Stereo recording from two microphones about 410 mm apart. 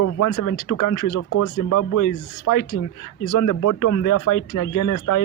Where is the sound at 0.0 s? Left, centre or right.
Left.